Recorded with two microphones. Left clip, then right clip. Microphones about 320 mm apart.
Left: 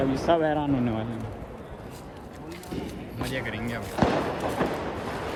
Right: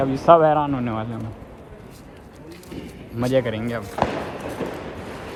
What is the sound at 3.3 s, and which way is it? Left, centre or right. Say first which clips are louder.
Speech: right 11 dB; centre.